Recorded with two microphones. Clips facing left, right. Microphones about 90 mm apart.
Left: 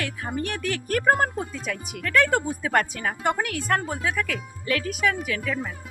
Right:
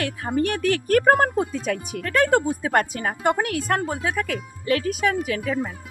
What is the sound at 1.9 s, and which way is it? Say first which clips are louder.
Speech: right 2 dB; 35° right (ahead or behind).